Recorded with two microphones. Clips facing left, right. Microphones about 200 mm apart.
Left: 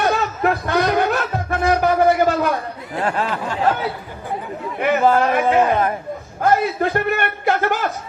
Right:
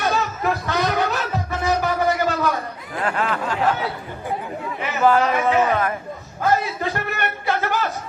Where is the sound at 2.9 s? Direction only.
30° left (ahead or behind).